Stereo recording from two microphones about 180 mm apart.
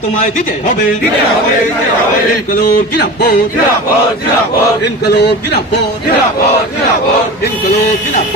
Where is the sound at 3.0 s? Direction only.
70° left (ahead or behind).